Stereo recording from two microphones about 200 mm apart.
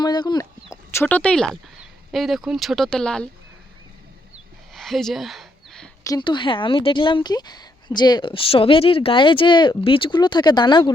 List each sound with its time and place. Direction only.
0.0 s speech: 20° left (ahead or behind)
0.9 s speech: 10° left (ahead or behind)
4.7 s a sound: centre (ahead or behind)
6.1 s speech: 25° left (ahead or behind)